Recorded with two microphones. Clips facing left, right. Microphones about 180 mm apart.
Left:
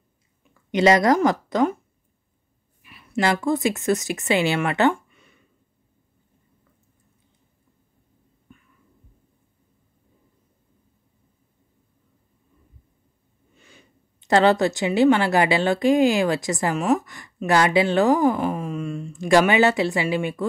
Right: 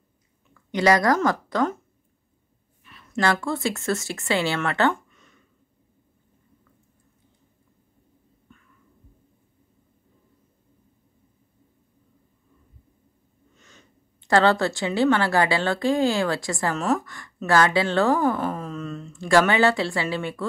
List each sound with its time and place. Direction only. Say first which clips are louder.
0.7 s speech: left 3 dB; 20° left (ahead or behind)
2.8 s speech: left 1 dB; 10° left (ahead or behind)
8.5 s heart sounds: left 3 dB; 15° left (ahead or behind)
13.6 s speech: left 2 dB; 10° left (ahead or behind)